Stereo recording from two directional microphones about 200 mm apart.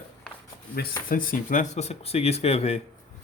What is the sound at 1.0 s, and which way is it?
Speech, 45° left (ahead or behind).